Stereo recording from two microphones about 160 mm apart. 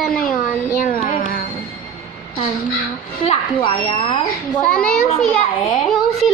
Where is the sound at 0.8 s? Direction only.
40° left (ahead or behind).